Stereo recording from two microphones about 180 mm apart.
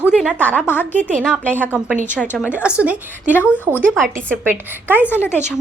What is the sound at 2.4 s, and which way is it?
Speech, 5° right (ahead or behind).